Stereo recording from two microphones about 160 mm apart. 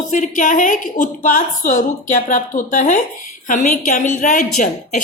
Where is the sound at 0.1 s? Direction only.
55° left (ahead or behind).